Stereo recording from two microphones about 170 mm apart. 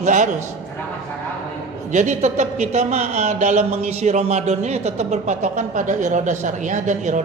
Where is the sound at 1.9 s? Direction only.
45° right (ahead or behind).